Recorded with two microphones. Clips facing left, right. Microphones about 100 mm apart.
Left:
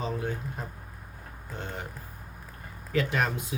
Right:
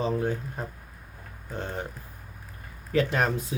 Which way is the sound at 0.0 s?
35° right (ahead or behind).